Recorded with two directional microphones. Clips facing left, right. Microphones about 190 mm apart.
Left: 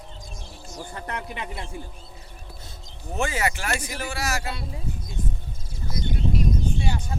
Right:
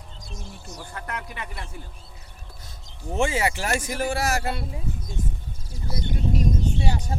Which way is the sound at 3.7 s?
45° right (ahead or behind).